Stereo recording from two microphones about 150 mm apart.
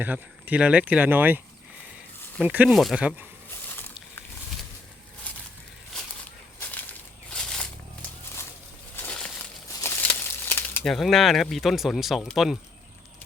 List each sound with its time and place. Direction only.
0.0 s speech: 10° right (ahead or behind)
2.4 s speech: 10° right (ahead or behind)
3.7 s a sound: 15° left (ahead or behind)
6.6 s a sound: 10° left (ahead or behind)
9.0 s crushing: 10° left (ahead or behind)
9.8 s crumpling: 15° left (ahead or behind)
10.8 s speech: centre (ahead or behind)